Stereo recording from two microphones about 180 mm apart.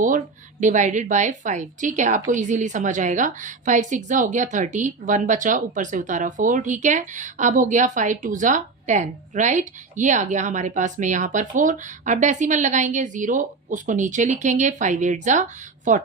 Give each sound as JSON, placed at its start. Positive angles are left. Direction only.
{"t": 0.6, "sound": "speech", "side_deg": -45}